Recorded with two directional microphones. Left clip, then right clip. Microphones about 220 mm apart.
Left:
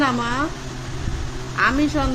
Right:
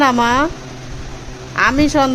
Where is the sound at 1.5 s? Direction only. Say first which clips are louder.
Right 6 dB; 30° right (ahead or behind).